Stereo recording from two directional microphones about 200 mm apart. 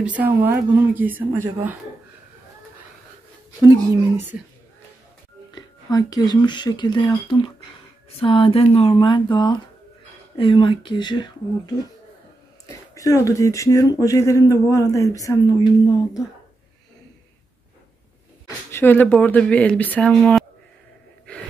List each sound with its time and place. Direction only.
0.0 s speech: 10° right (ahead or behind)
3.6 s speech: 10° right (ahead or behind)
5.5 s speech: 20° left (ahead or behind)
18.7 s speech: 10° left (ahead or behind)